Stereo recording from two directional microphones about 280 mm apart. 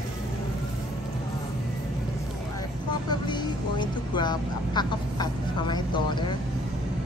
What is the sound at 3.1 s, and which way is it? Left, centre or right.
Speech, centre.